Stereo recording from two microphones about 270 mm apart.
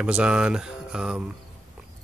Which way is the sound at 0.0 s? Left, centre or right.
Centre.